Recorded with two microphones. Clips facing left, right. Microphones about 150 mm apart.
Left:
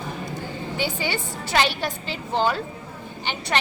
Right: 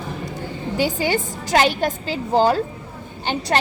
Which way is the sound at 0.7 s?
45° right (ahead or behind).